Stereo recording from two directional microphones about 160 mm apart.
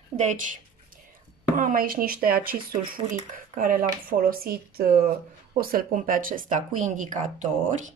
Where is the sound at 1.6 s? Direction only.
60° right (ahead or behind).